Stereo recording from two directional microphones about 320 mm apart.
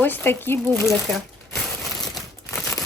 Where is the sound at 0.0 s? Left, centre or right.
Centre.